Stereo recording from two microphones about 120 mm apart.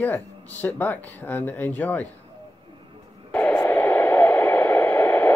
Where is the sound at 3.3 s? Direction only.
10° left (ahead or behind).